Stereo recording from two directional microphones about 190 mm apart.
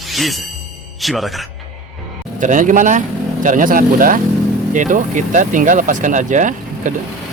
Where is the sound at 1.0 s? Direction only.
Centre (ahead or behind).